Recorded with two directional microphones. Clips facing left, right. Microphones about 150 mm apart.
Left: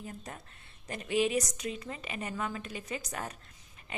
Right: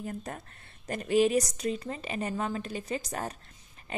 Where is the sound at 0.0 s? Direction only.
50° right (ahead or behind).